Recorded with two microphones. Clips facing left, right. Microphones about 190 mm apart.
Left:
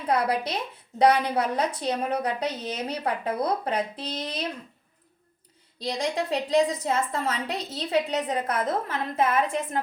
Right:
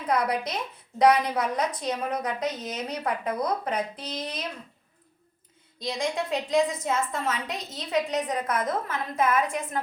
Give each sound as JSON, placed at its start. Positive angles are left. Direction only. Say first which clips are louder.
{"t": 0.1, "sound": "a woman's voice", "louder": "left 1 dB", "side_deg": 30}
{"t": 5.8, "sound": "a woman's voice", "louder": "left 1 dB", "side_deg": 35}